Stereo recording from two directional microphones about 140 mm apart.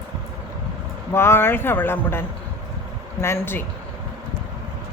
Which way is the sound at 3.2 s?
15° left (ahead or behind).